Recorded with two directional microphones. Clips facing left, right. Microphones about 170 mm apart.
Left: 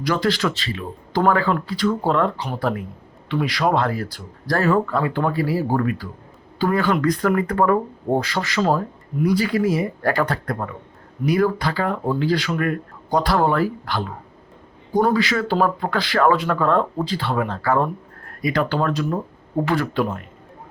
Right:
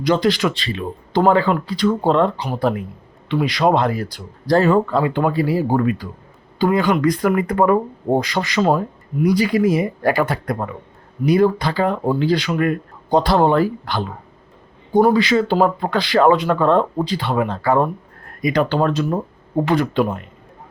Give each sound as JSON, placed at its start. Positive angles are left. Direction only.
{"t": 0.0, "sound": "speech", "side_deg": -20}
{"t": 15.1, "sound": "speech", "side_deg": -20}